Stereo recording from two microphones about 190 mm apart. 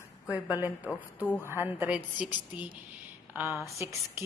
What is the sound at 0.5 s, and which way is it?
A woman's voice, 10° right (ahead or behind).